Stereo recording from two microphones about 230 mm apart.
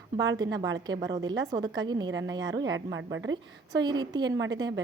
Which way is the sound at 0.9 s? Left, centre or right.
Centre.